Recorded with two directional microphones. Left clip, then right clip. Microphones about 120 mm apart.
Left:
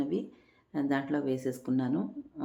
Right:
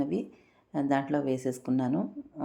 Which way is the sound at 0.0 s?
35° right (ahead or behind).